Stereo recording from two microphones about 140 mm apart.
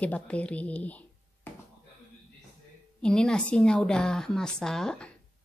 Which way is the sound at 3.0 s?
5° left (ahead or behind).